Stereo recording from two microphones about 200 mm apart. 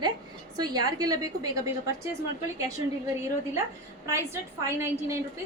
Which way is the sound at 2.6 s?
15° right (ahead or behind).